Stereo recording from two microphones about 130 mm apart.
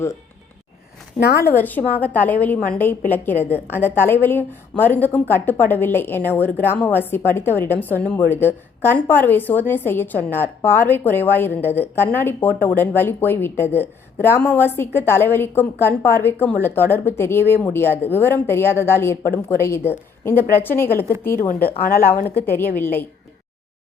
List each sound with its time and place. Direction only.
1.4 s a woman's voice: 15° left (ahead or behind)